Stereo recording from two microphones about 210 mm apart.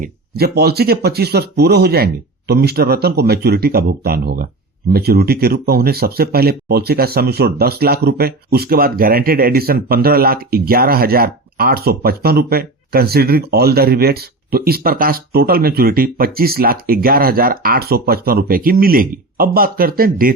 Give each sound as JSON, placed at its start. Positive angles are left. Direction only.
{"t": 0.0, "sound": "speech", "side_deg": -45}